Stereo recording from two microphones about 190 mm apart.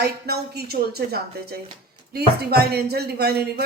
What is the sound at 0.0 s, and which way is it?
Speech, 55° right (ahead or behind).